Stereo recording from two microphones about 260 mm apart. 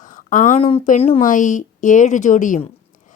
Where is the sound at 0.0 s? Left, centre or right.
Left.